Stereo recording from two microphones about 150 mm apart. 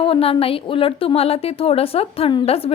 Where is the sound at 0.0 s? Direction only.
40° left (ahead or behind).